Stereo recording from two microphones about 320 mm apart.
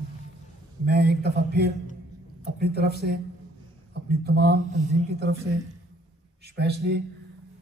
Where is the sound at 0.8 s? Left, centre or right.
Right.